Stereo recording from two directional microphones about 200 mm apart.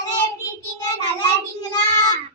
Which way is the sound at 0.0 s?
20° left (ahead or behind).